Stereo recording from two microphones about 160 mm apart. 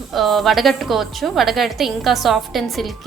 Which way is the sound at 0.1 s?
Centre (ahead or behind).